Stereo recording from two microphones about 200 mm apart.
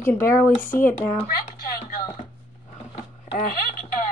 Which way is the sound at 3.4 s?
45° left (ahead or behind).